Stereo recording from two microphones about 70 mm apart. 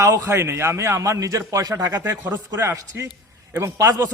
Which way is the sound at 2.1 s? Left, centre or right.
Right.